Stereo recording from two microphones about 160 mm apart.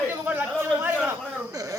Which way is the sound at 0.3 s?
10° right (ahead or behind).